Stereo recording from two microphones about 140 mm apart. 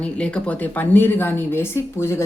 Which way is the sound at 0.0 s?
5° left (ahead or behind).